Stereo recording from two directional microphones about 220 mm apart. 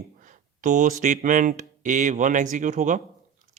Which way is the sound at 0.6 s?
35° right (ahead or behind).